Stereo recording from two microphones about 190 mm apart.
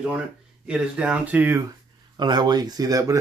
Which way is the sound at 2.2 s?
20° right (ahead or behind).